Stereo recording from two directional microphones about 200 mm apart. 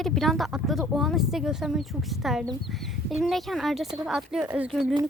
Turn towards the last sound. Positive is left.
turn(degrees=-5)  # may be behind; listen again after turning